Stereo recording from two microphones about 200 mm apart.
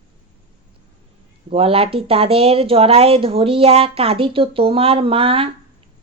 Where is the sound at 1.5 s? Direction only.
30° right (ahead or behind).